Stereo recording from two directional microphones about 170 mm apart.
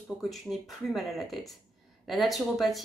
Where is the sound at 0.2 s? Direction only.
Centre (ahead or behind).